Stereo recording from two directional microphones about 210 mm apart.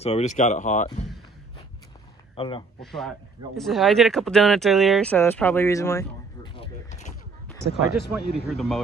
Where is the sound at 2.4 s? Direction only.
25° left (ahead or behind).